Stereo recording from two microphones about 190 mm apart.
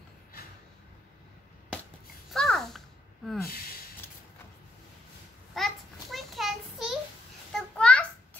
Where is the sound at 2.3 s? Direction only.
Centre (ahead or behind).